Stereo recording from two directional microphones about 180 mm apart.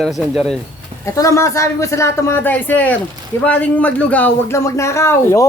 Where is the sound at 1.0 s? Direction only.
15° left (ahead or behind).